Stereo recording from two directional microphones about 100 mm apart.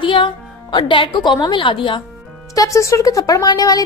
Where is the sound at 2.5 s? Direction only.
35° left (ahead or behind).